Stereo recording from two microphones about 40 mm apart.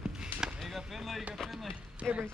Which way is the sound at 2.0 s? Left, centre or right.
Centre.